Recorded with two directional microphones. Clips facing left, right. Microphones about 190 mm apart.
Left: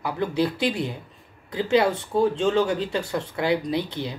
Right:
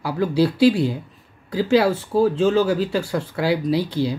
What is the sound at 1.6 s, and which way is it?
Speech, 5° right (ahead or behind).